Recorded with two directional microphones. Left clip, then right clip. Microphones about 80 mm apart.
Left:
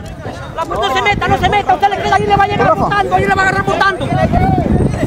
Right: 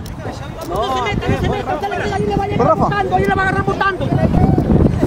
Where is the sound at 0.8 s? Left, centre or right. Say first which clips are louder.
Left 5 dB; left.